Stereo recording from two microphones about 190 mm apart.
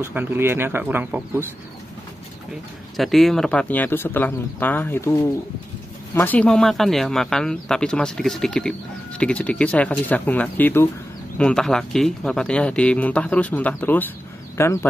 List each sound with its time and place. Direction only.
0.0 s speech: 10° right (ahead or behind)
3.0 s speech: centre (ahead or behind)
6.1 s speech: 10° left (ahead or behind)